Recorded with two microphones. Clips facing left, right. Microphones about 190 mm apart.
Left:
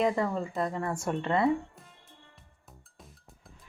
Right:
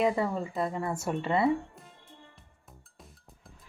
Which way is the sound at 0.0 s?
5° right (ahead or behind).